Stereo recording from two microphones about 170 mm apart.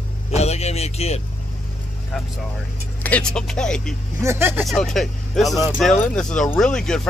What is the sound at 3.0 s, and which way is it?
Speech, 5° left (ahead or behind).